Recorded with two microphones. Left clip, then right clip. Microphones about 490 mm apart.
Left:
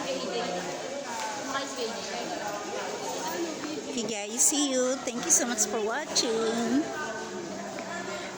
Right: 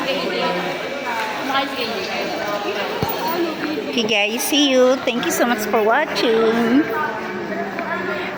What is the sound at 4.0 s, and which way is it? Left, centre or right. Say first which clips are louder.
A woman's voice: right 12 dB; left.